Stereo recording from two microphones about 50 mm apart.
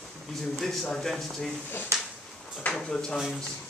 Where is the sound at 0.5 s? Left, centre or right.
Centre.